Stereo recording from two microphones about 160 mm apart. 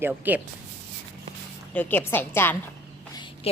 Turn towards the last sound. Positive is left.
turn(degrees=40)  # may be behind; listen again after turning